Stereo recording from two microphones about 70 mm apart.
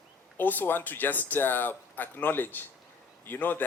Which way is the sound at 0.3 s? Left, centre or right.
Left.